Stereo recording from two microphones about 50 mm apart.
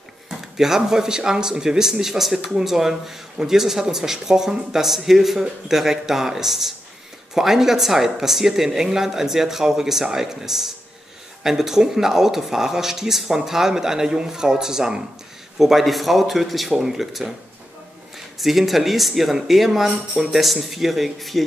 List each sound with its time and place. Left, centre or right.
0.3 s speech: centre